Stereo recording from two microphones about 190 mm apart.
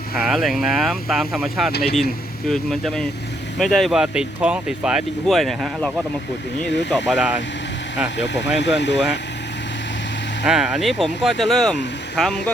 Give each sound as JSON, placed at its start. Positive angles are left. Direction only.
{"t": 0.2, "sound": "speech", "side_deg": 0}
{"t": 7.1, "sound": "speech", "side_deg": -5}
{"t": 8.2, "sound": "speech", "side_deg": 65}
{"t": 10.4, "sound": "speech", "side_deg": -5}